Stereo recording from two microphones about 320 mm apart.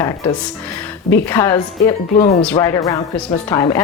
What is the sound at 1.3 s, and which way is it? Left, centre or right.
Speech, centre.